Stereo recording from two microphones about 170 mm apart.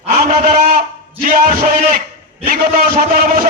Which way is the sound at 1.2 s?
50° right (ahead or behind).